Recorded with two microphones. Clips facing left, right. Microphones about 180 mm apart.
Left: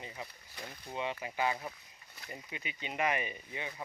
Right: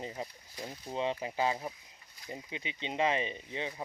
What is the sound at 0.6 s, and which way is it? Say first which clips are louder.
Speech: right 4 dB; 20° right (ahead or behind).